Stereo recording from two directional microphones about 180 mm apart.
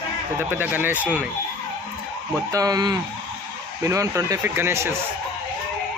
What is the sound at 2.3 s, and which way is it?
Speech, 20° right (ahead or behind).